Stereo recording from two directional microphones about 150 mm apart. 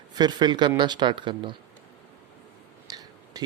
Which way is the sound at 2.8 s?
25° right (ahead or behind).